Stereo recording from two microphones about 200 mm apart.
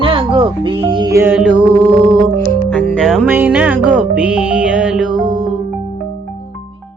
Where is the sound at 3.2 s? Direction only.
10° right (ahead or behind).